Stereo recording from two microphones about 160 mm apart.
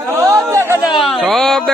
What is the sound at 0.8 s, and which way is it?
Speech, 30° left (ahead or behind).